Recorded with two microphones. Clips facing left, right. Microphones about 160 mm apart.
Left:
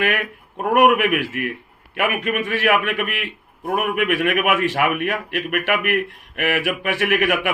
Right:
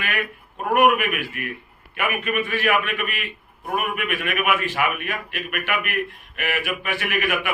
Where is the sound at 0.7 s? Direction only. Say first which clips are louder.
Left 3 dB; 75° left (ahead or behind).